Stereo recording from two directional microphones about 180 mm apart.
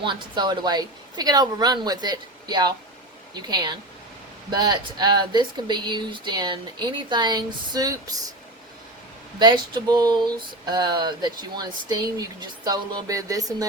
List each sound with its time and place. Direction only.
0.0 s speech: 25° right (ahead or behind)
9.4 s speech: 25° right (ahead or behind)